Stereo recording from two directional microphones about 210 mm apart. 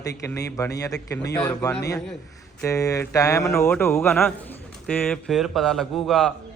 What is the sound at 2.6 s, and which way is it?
A man's voice, 15° left (ahead or behind).